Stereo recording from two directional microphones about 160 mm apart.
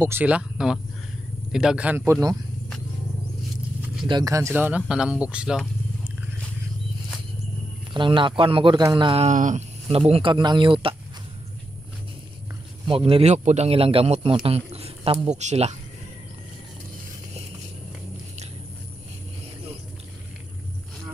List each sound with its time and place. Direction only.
0.0 s speech: 10° right (ahead or behind)
4.1 s speech: 20° right (ahead or behind); by 5.6 s 5° right (ahead or behind)
7.9 s a man's voice: 30° right (ahead or behind)
12.8 s a man's voice: 35° right (ahead or behind)